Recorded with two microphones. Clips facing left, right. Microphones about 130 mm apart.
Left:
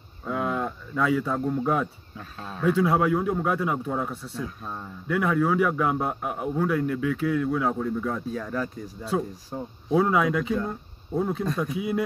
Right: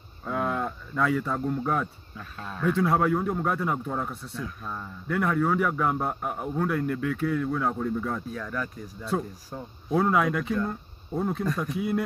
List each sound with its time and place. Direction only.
0.2 s a sound: centre (ahead or behind)
2.1 s speech: 35° left (ahead or behind)
2.6 s a man's voice: 5° left (ahead or behind)
4.4 s speech: 30° left (ahead or behind)
5.0 s a man's voice: 5° left (ahead or behind)
8.3 s speech: 30° left (ahead or behind)
9.9 s a man's voice: 5° left (ahead or behind)